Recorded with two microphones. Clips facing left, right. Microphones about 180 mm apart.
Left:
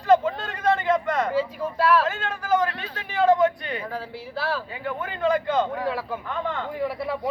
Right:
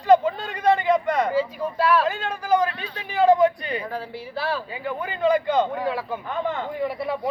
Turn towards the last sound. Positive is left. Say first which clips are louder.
# right 2 dB
turn(degrees=-20)  # may be behind; listen again after turning